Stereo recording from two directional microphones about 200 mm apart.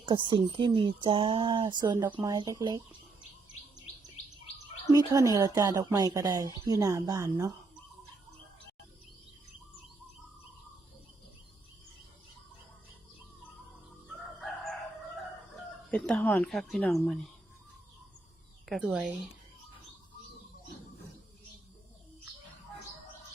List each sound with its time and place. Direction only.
0.0 s speech: 25° right (ahead or behind)
4.9 s speech: 20° right (ahead or behind)
14.4 s crowing: centre (ahead or behind)
15.9 s speech: 5° left (ahead or behind)
18.7 s speech: 5° right (ahead or behind)